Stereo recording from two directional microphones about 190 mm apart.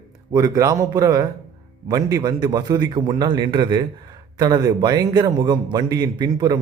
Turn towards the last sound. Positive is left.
turn(degrees=-20)  # may be behind; listen again after turning